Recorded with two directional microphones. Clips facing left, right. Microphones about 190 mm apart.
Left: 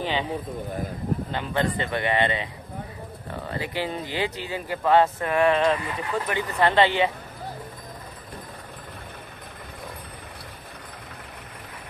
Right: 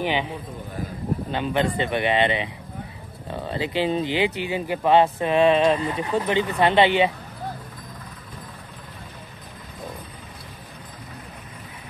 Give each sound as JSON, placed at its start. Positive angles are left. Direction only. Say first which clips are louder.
{"t": 0.0, "sound": "speech", "louder": "right 2 dB", "side_deg": -15}
{"t": 1.3, "sound": "speech", "louder": "right 5 dB", "side_deg": -20}